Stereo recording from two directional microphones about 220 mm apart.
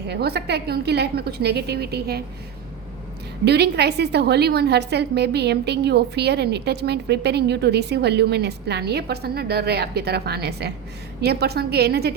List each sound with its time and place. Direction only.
0.1 s a woman's voice: 45° right (ahead or behind)
3.4 s a woman's voice: 50° right (ahead or behind)